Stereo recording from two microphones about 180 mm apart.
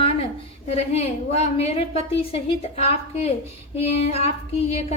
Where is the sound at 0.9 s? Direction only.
35° left (ahead or behind).